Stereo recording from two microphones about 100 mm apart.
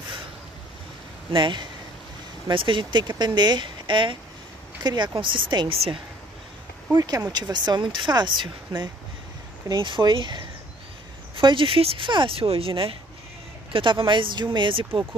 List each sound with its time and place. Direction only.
1.3 s speech: 50° right (ahead or behind)
7.3 s speech: 45° right (ahead or behind)
11.3 s speech: 60° right (ahead or behind)